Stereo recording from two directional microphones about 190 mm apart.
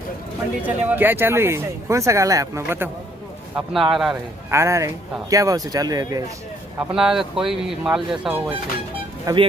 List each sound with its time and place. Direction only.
0.8 s speech: 10° right (ahead or behind)
3.5 s speech: centre (ahead or behind)
4.5 s speech: 15° right (ahead or behind)
6.9 s speech: centre (ahead or behind)
9.2 s speech: 25° right (ahead or behind)